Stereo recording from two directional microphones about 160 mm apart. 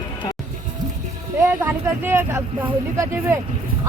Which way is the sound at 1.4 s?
15° right (ahead or behind).